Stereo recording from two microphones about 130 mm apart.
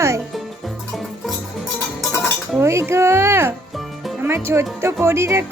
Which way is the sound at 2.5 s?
20° right (ahead or behind).